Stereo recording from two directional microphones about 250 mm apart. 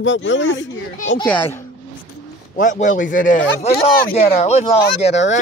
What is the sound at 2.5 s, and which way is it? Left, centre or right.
Speech, left.